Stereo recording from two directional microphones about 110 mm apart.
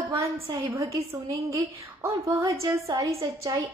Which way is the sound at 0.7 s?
30° right (ahead or behind).